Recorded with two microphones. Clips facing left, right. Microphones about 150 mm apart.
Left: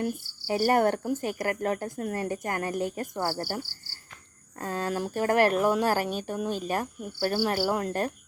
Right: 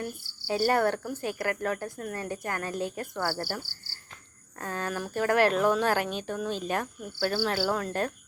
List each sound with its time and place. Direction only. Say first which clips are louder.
0.0 s speech: left 6 dB; 15° left (ahead or behind)
2.1 s speech: left 3 dB; 15° left (ahead or behind)
4.6 s speech: left 3 dB; 15° left (ahead or behind)